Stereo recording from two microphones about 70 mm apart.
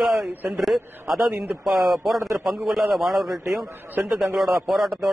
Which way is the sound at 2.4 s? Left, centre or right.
Centre.